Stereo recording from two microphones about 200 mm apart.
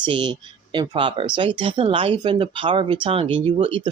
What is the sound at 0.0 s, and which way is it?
Speech, 25° right (ahead or behind).